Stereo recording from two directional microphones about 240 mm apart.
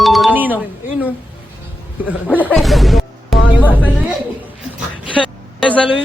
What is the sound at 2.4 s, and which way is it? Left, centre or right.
Music, centre.